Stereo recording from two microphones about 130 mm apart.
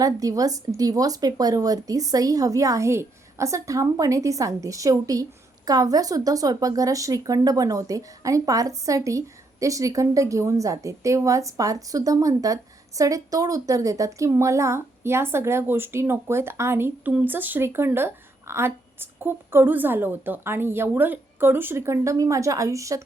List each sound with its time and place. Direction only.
0.0 s a woman's voice: 25° right (ahead or behind)